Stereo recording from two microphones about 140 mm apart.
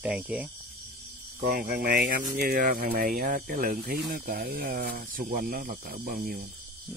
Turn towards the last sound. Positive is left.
turn(degrees=-90)